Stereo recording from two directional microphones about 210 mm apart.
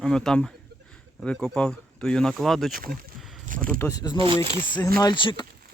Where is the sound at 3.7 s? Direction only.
10° left (ahead or behind).